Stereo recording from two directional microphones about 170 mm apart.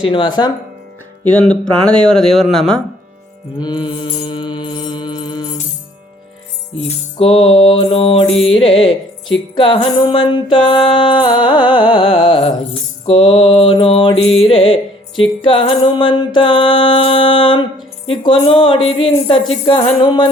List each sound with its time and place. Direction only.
0.0 s music: 30° left (ahead or behind)
1.2 s speech: 10° left (ahead or behind)
3.6 s mantra: 25° left (ahead or behind)
6.7 s music: 35° left (ahead or behind)